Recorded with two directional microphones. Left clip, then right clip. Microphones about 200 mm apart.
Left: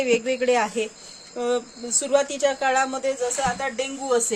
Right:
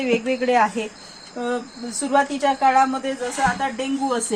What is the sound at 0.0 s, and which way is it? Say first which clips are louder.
A woman's voice: even; 50° left (ahead or behind).